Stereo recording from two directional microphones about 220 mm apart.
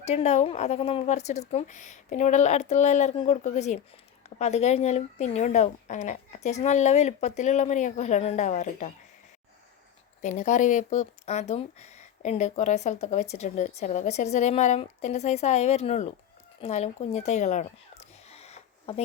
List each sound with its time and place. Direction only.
0.0 s speech: 30° left (ahead or behind)
10.2 s speech: 35° left (ahead or behind)
16.6 s a sound: 30° left (ahead or behind)